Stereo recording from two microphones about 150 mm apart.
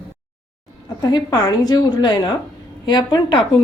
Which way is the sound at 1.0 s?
25° left (ahead or behind).